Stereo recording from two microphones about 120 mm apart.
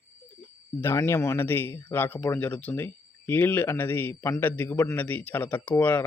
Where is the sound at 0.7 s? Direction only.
20° left (ahead or behind).